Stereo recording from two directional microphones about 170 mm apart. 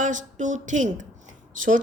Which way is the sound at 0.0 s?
45° right (ahead or behind).